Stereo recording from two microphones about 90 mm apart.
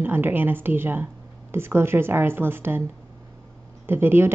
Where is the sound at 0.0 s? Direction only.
25° right (ahead or behind).